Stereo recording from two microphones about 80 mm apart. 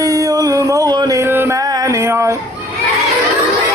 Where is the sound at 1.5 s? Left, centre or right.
Right.